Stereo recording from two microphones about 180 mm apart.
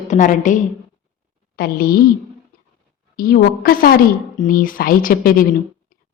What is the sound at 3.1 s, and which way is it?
A woman's voice, 55° left (ahead or behind).